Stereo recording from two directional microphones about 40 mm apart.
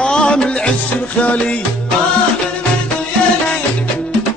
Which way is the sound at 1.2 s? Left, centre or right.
Left.